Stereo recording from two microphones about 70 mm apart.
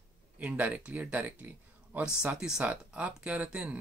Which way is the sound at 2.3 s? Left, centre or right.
Centre.